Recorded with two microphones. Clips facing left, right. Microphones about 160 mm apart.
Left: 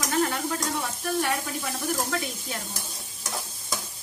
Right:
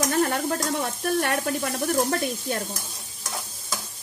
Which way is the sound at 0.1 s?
50° right (ahead or behind).